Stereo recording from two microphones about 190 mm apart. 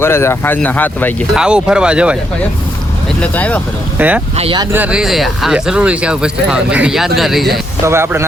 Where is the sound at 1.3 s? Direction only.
5° right (ahead or behind).